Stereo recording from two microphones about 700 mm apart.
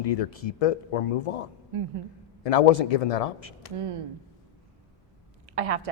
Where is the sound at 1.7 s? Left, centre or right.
Right.